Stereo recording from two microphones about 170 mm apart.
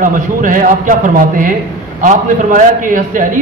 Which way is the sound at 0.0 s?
50° right (ahead or behind).